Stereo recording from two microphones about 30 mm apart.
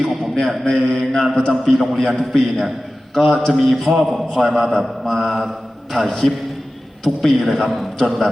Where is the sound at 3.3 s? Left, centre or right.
Centre.